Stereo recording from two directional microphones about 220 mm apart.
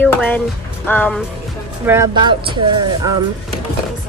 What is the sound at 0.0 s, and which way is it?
Speech, 10° left (ahead or behind).